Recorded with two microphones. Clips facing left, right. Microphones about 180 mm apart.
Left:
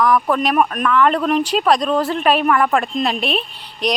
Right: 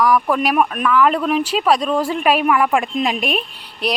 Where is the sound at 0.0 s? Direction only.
10° right (ahead or behind).